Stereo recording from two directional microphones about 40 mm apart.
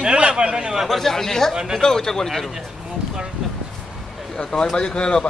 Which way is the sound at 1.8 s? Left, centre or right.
Centre.